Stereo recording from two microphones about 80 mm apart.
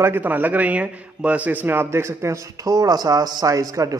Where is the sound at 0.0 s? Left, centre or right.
Right.